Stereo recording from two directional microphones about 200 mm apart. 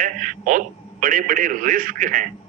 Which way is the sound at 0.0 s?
40° right (ahead or behind).